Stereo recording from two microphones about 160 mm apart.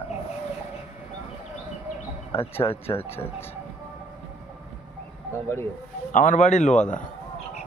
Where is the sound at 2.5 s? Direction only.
15° left (ahead or behind).